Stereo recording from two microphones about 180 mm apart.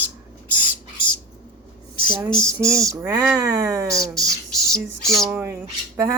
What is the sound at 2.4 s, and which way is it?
Speech, 15° right (ahead or behind).